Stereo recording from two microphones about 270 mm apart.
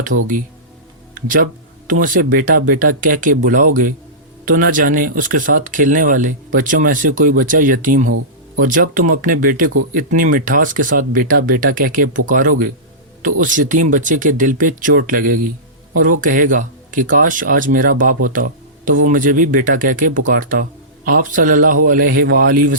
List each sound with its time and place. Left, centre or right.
1.1 s speech: right